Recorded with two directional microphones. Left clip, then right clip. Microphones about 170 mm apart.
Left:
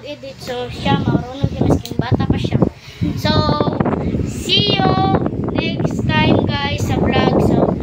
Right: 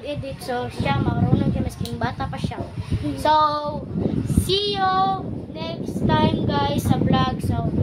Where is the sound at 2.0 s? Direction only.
20° right (ahead or behind).